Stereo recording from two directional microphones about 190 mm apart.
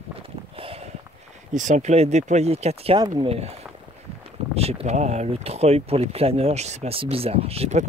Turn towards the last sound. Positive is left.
turn(degrees=-35)  # may be behind; listen again after turning